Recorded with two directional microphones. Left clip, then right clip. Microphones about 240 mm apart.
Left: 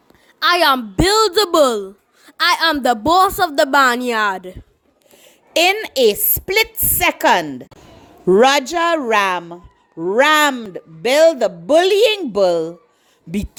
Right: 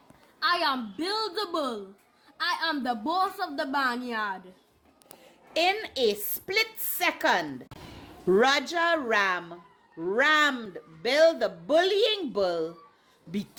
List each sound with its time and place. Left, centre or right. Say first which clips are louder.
0.3 s a woman's voice: left 12 dB; left